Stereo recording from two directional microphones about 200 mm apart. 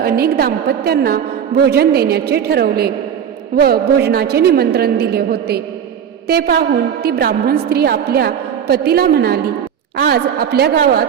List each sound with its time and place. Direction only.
0.0 s a woman's voice: 50° right (ahead or behind)